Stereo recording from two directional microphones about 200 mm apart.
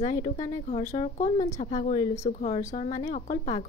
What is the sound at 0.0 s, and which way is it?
A woman's voice, 25° left (ahead or behind).